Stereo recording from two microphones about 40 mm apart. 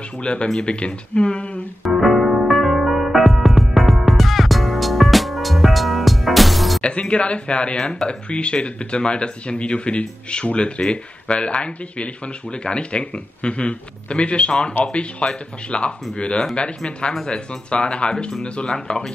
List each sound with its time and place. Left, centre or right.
0.2 s speech: left
1.8 s music: centre
6.8 s speech: left